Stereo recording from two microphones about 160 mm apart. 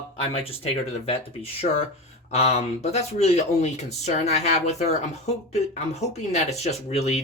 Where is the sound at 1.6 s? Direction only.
50° left (ahead or behind).